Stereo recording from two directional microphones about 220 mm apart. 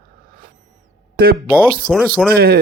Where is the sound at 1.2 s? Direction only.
40° right (ahead or behind).